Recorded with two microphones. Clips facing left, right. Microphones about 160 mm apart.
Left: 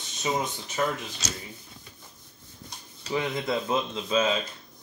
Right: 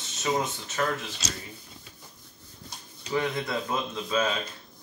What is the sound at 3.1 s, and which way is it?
Speech, 20° left (ahead or behind).